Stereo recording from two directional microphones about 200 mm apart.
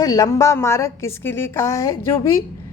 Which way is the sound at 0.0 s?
20° left (ahead or behind).